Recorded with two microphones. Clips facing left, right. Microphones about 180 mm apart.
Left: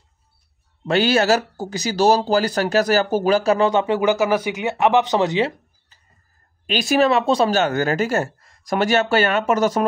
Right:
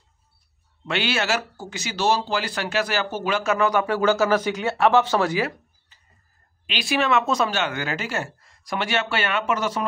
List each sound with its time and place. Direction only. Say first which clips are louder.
0.8 s speech: left 8 dB; 40° left (ahead or behind); by 5.5 s 20° left (ahead or behind)
6.6 s speech: left 7 dB; 45° left (ahead or behind)